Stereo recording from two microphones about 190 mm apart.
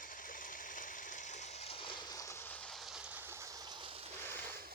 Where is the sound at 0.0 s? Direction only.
45° left (ahead or behind); by 4.1 s 30° right (ahead or behind).